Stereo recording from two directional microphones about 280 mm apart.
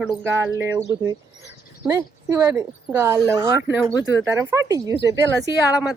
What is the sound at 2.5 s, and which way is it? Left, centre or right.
A woman's voice, centre.